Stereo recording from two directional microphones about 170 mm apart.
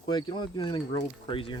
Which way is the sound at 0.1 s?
25° left (ahead or behind).